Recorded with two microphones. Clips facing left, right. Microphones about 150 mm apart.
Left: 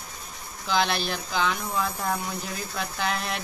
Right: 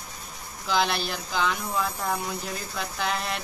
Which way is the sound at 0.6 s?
Centre (ahead or behind).